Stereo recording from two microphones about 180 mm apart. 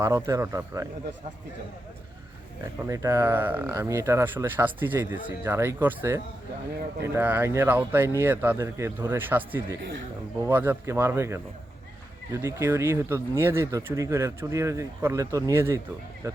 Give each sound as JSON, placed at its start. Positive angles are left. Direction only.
{"t": 0.0, "sound": "speech", "side_deg": -15}
{"t": 2.8, "sound": "speech", "side_deg": -15}